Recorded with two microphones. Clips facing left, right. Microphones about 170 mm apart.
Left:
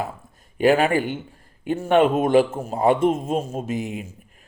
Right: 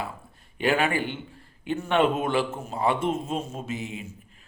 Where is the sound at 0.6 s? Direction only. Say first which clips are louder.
Left 6 dB; 40° left (ahead or behind).